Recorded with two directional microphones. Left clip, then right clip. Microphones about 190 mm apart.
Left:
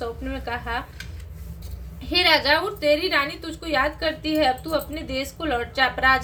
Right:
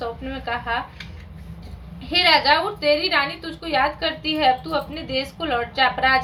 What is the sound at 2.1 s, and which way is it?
A woman's voice, 25° left (ahead or behind).